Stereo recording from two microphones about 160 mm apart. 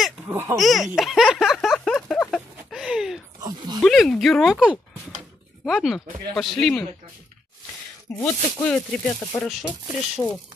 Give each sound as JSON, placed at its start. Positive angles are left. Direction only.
{"t": 0.3, "sound": "speech", "side_deg": -15}
{"t": 0.6, "sound": "speech", "side_deg": 0}
{"t": 0.9, "sound": "a sound", "side_deg": 0}
{"t": 3.4, "sound": "a sound", "side_deg": -25}
{"t": 3.8, "sound": "speech", "side_deg": 0}
{"t": 8.2, "sound": "speech", "side_deg": 10}
{"t": 9.4, "sound": "speech", "side_deg": 0}